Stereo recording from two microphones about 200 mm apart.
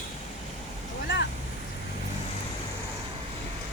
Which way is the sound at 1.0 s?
55° left (ahead or behind).